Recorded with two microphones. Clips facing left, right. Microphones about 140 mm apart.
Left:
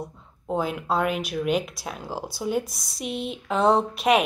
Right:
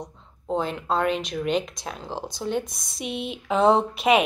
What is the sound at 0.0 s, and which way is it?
Speech, 5° left (ahead or behind).